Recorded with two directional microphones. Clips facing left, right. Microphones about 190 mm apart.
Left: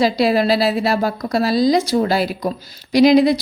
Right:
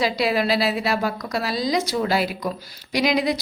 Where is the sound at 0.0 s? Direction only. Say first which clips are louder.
Left 6 dB; 35° left (ahead or behind).